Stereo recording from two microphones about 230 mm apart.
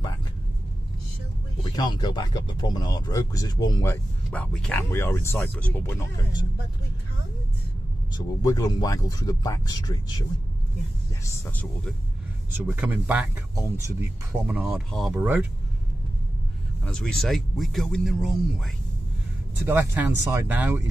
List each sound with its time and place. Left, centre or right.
1.6 s speech: centre
8.2 s speech: centre
11.3 s speech: centre
12.5 s speech: centre
16.8 s speech: centre
19.6 s speech: centre